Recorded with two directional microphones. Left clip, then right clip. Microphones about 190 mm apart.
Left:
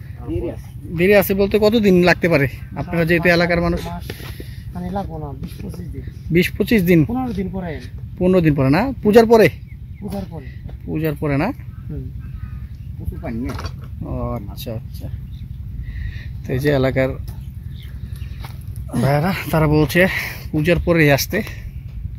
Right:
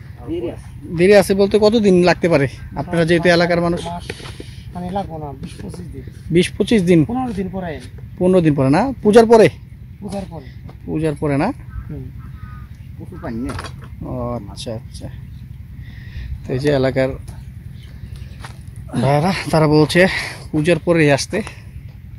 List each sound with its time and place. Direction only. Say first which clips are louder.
0.9 s speech: right 3 dB; 20° right (ahead or behind)
4.1 s a sound: right 3 dB; 10° right (ahead or behind)
4.9 s speech: right 2 dB; 10° right (ahead or behind)
13.3 s speech: right 1 dB; centre (ahead or behind)
14.1 s speech: right 2 dB; 15° right (ahead or behind)
16.4 s speech: right 1 dB; 5° right (ahead or behind)
18.9 s speech: right 2 dB; 15° right (ahead or behind)